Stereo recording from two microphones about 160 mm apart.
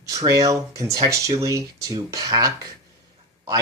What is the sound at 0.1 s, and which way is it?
Speech, 20° right (ahead or behind).